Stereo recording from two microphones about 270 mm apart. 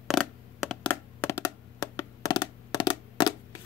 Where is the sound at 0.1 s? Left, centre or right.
Centre.